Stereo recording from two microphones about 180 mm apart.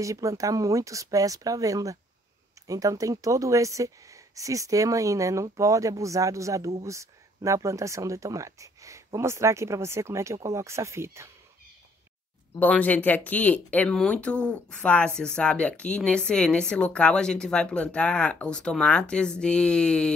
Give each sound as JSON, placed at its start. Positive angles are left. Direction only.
{"t": 0.0, "sound": "speech", "side_deg": -15}
{"t": 12.5, "sound": "speech", "side_deg": 10}